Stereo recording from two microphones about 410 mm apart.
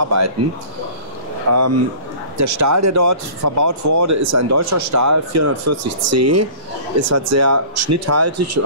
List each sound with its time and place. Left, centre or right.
0.0 s speech: right
1.5 s speech: right